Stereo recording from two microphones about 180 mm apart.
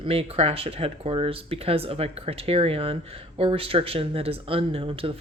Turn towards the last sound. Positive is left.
turn(degrees=-30)  # may be behind; listen again after turning